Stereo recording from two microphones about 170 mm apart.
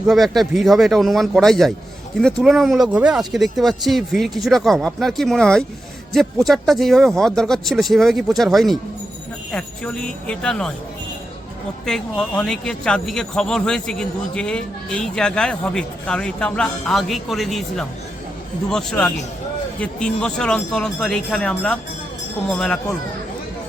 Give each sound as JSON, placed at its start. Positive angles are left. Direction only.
{"t": 0.1, "sound": "speech", "side_deg": 0}
{"t": 11.9, "sound": "speech", "side_deg": 5}